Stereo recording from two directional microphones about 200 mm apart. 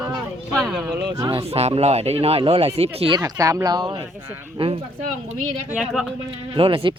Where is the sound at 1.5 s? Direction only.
30° right (ahead or behind).